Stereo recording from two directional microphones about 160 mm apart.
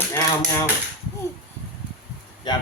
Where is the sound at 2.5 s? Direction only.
25° left (ahead or behind).